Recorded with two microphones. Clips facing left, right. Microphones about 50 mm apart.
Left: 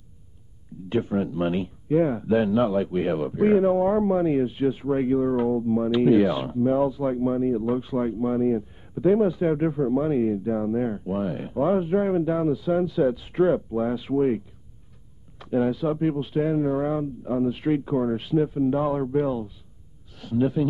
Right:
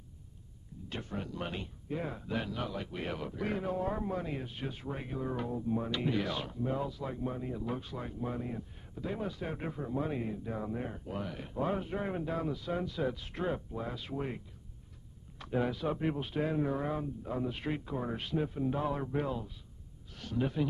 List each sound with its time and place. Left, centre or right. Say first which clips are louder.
0.8 s a man's voice: left 16 dB; left
15.3 s a man's voice: left 10 dB; centre
18.1 s a man's voice: left 11 dB; centre